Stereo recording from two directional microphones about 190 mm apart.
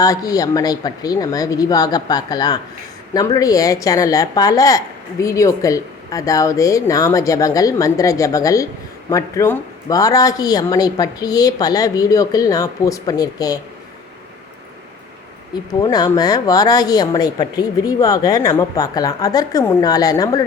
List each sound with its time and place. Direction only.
0.0 s speech: 20° left (ahead or behind)
15.8 s speech: 20° left (ahead or behind)